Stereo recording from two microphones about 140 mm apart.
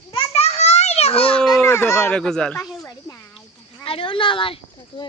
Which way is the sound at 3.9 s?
40° left (ahead or behind).